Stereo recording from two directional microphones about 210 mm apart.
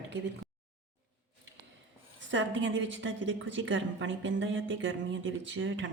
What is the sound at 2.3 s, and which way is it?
A woman's voice, 65° right (ahead or behind).